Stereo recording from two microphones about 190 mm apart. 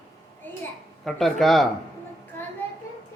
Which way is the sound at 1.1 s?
Centre (ahead or behind).